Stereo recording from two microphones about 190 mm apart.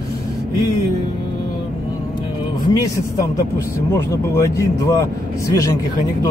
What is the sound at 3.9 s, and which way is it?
Speech, 15° left (ahead or behind).